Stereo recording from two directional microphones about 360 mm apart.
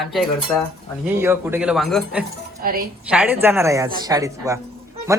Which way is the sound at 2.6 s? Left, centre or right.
Right.